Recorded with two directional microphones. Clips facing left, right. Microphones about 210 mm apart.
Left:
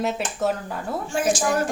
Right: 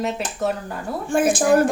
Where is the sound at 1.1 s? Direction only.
55° right (ahead or behind).